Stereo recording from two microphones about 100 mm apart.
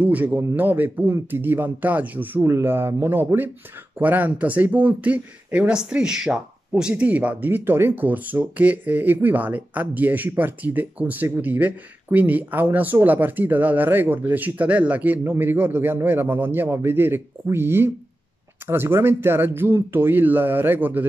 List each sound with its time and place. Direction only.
0.0 s speech: 15° right (ahead or behind)